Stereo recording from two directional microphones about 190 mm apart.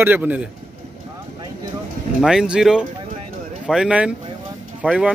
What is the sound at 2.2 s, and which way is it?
Speech, centre (ahead or behind).